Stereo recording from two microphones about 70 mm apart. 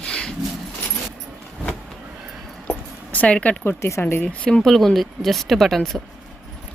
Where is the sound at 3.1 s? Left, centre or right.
Centre.